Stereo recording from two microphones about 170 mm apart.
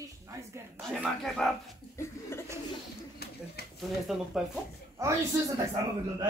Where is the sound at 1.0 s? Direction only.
Centre (ahead or behind).